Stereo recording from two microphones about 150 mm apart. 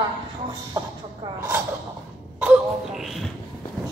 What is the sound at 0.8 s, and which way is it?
Music, 20° right (ahead or behind).